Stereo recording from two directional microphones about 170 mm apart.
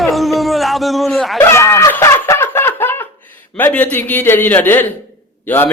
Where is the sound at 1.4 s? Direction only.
15° left (ahead or behind).